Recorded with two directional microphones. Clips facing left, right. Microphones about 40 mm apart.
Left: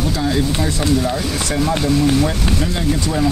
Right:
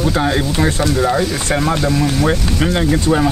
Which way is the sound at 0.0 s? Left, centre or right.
Right.